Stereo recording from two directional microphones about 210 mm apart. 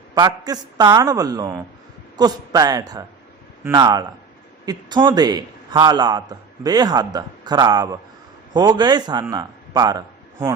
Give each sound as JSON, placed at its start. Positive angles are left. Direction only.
{"t": 0.1, "sound": "a man's voice", "side_deg": -20}